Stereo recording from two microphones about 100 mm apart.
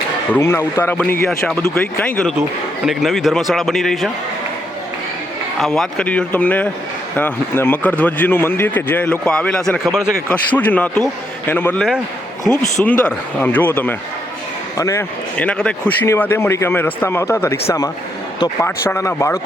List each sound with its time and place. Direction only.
0.3 s speech: 25° left (ahead or behind)
0.9 s a man's voice: 10° left (ahead or behind)
1.7 s a man's voice: 20° left (ahead or behind)
2.8 s a man's voice: centre (ahead or behind)
5.5 s a man's voice: 5° left (ahead or behind)
10.2 s a man's voice: 15° left (ahead or behind)
14.8 s speech: 35° left (ahead or behind)
15.4 s a man's voice: 10° left (ahead or behind)
16.0 s speech: 25° left (ahead or behind)